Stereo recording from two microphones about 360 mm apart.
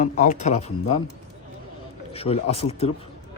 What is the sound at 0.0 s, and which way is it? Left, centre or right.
Speech, left.